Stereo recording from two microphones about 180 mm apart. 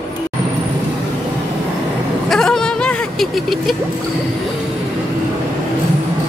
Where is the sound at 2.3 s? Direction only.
5° left (ahead or behind).